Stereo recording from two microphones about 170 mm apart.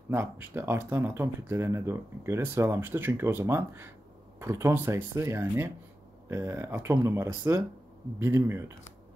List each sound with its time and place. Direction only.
0.1 s speech: 15° right (ahead or behind)